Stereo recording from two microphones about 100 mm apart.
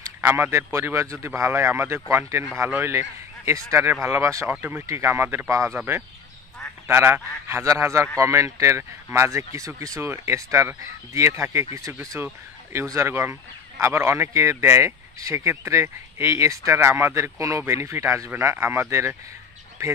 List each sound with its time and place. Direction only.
0.2 s speech: 20° right (ahead or behind)
4.5 s speech: 20° right (ahead or behind)
6.9 s speech: 25° right (ahead or behind)
12.9 s speech: 25° right (ahead or behind)